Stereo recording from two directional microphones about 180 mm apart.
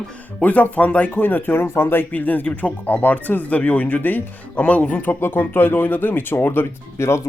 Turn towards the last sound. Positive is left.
turn(degrees=15)  # may be behind; listen again after turning